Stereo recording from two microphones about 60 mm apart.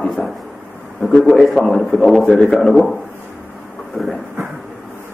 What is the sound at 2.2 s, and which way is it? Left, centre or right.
Speech, left.